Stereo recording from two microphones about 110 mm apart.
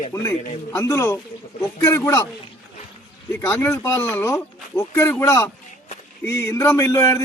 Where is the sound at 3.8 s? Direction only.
25° left (ahead or behind).